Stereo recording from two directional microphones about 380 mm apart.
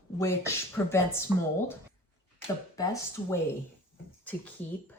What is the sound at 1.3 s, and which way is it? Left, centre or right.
Speech, centre.